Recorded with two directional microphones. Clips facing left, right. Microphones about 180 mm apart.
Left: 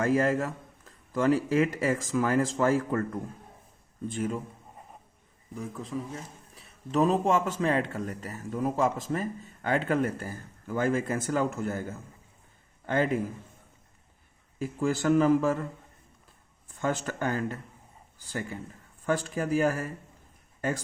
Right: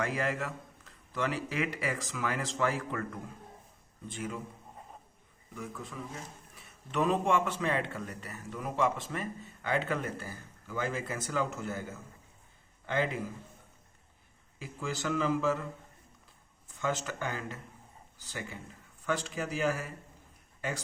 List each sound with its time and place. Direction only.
0.0 s a man's voice: 45° left (ahead or behind)
5.5 s a man's voice: 35° left (ahead or behind)
14.6 s a man's voice: 50° left (ahead or behind)
16.8 s a man's voice: 45° left (ahead or behind)